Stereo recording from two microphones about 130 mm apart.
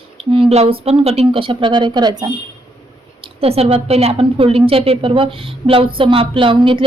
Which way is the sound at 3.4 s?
50° right (ahead or behind).